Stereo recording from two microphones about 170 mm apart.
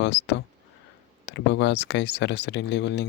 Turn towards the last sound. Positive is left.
turn(degrees=90)